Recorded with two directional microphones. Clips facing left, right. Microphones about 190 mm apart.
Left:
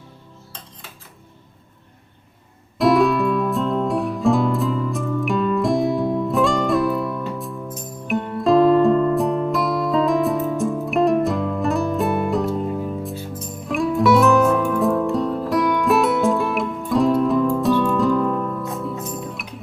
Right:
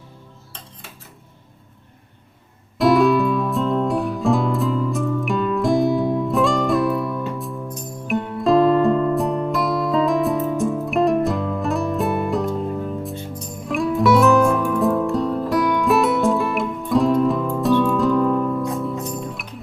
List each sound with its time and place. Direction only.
2.7 s music: centre (ahead or behind)